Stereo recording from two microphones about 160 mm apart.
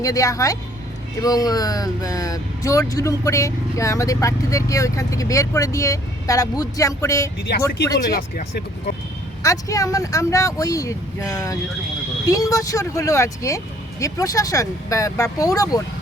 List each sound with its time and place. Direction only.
0.0 s speech: 20° left (ahead or behind)
8.1 s speech: 75° left (ahead or behind)
9.4 s speech: 20° left (ahead or behind)